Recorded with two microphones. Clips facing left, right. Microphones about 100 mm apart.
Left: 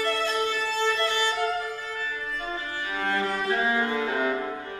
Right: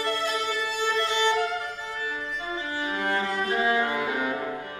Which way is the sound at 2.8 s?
20° right (ahead or behind).